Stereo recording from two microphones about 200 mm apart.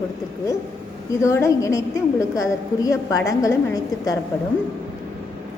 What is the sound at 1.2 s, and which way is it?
A woman's voice, 15° left (ahead or behind).